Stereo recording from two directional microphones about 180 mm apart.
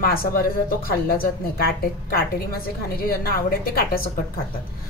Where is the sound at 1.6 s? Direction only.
55° left (ahead or behind).